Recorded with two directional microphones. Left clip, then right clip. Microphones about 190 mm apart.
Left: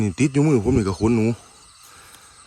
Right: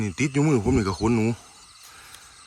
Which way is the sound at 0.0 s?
15° left (ahead or behind).